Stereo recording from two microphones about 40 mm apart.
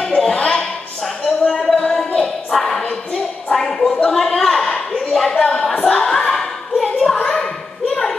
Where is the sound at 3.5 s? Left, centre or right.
Centre.